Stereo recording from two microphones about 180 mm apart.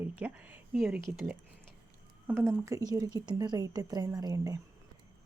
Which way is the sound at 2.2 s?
15° right (ahead or behind).